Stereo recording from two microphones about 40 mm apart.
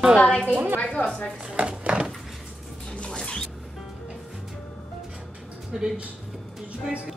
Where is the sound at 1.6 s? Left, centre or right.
Right.